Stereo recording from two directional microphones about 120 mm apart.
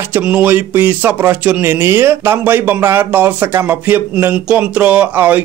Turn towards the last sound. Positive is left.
turn(degrees=-15)  # may be behind; listen again after turning